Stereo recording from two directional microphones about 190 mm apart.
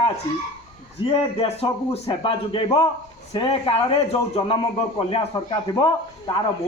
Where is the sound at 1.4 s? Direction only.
30° left (ahead or behind).